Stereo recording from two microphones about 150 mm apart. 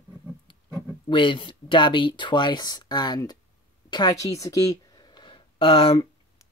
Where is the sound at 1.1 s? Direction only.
35° left (ahead or behind).